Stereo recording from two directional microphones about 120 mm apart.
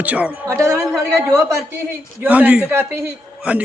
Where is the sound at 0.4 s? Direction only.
25° right (ahead or behind).